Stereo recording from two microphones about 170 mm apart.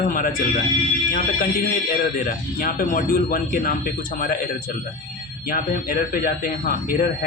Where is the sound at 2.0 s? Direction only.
55° left (ahead or behind).